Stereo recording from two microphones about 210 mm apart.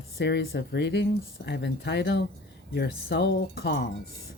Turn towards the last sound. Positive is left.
turn(degrees=55)  # may be behind; listen again after turning